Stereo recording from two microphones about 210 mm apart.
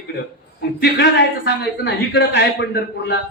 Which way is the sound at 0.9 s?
55° left (ahead or behind).